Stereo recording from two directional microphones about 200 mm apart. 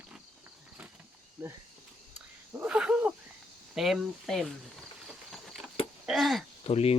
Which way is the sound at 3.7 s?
Centre (ahead or behind).